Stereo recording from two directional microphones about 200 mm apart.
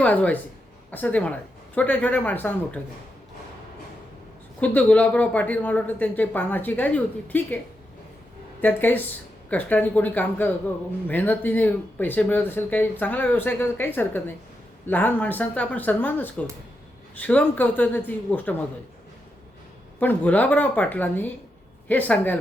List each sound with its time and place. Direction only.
0.0 s speech: 5° left (ahead or behind)
4.6 s speech: 5° left (ahead or behind)
8.6 s speech: 10° left (ahead or behind)
20.0 s speech: 10° left (ahead or behind)